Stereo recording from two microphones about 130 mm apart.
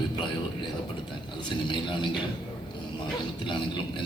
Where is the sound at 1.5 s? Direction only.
40° left (ahead or behind).